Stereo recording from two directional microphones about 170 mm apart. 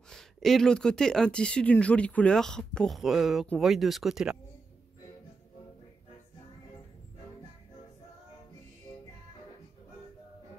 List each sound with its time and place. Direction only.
0.1 s speech: centre (ahead or behind)